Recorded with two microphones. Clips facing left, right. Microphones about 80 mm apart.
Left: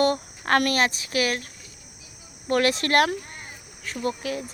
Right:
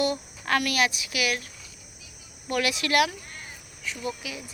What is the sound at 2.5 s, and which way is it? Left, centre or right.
Speech, left.